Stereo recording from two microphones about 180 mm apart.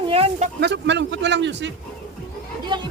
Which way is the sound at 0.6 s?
75° right (ahead or behind).